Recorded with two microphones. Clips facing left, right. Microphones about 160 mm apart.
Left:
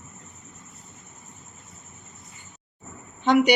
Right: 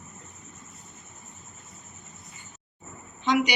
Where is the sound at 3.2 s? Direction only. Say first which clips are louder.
Left 5 dB; 55° left (ahead or behind).